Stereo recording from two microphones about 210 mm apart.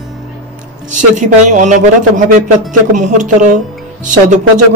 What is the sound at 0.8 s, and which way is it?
Speech, 35° right (ahead or behind).